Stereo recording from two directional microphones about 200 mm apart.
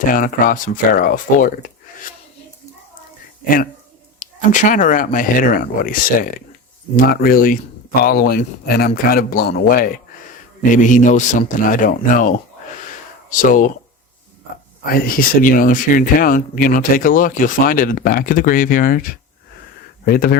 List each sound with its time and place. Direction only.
0.1 s speech: 45° left (ahead or behind)
3.4 s a man's voice: 45° left (ahead or behind)
14.8 s speech: 45° left (ahead or behind)
20.1 s speech: 45° left (ahead or behind)